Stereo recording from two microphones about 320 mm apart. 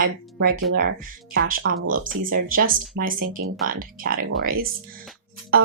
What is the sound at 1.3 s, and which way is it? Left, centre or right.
Speech, right.